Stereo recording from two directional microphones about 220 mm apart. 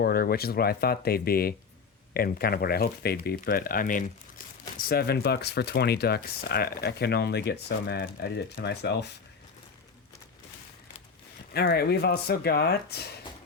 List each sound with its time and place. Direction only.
0.0 s speech: 45° left (ahead or behind)
11.5 s speech: 45° left (ahead or behind)